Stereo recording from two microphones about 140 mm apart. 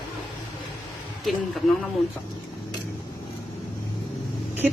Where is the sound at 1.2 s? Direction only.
Centre (ahead or behind).